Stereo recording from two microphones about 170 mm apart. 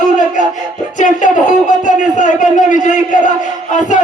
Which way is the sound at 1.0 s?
45° left (ahead or behind).